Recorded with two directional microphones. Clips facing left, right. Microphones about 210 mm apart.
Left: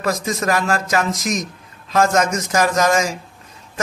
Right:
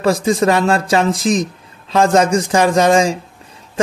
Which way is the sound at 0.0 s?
30° right (ahead or behind).